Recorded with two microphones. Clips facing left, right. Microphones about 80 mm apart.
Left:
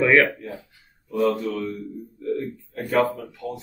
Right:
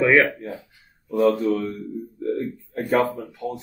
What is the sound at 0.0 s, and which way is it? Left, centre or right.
Speech, centre.